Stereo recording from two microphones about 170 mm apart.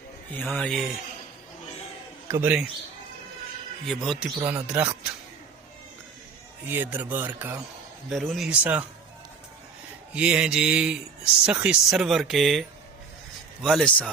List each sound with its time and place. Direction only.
0.3 s speech: 5° left (ahead or behind)
2.2 s a man's voice: 15° right (ahead or behind)
3.8 s speech: centre (ahead or behind)
4.4 s speech: 10° right (ahead or behind)
6.7 s speech: 10° right (ahead or behind)
10.2 s speech: 5° right (ahead or behind)